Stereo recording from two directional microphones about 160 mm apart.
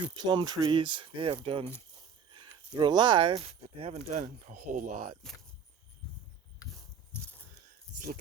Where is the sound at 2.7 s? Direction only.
25° right (ahead or behind); by 5.1 s 45° right (ahead or behind).